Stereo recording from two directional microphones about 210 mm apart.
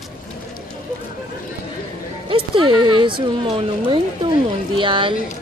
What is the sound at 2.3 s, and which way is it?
Speech, 25° right (ahead or behind).